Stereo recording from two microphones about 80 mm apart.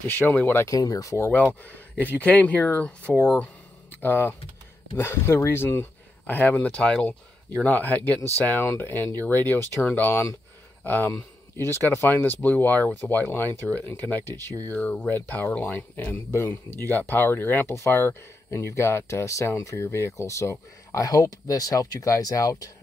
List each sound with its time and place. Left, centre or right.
0.0 s speech: left
0.7 s speech: left
1.3 s speech: left
14.3 s speech: right
14.7 s speech: centre
16.1 s speech: left
16.4 s speech: left